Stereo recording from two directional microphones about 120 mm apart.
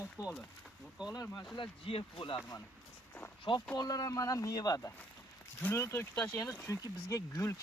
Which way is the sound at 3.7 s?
35° left (ahead or behind).